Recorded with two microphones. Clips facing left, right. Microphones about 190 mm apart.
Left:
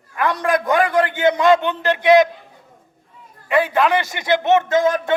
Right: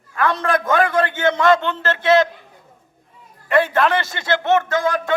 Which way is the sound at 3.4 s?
10° left (ahead or behind).